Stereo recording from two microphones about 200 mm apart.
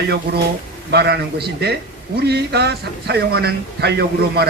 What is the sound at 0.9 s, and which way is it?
A man's voice, 55° right (ahead or behind).